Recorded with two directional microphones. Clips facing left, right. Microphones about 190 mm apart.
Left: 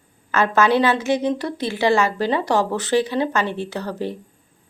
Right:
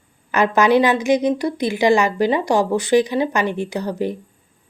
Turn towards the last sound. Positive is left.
turn(degrees=-15)  # may be behind; listen again after turning